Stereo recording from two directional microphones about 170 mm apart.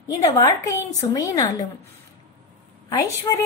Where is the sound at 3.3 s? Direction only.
25° left (ahead or behind).